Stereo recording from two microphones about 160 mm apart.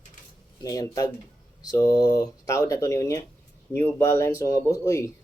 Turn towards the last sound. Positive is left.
turn(degrees=20)  # may be behind; listen again after turning